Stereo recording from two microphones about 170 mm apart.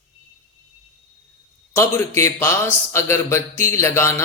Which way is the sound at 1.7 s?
15° left (ahead or behind).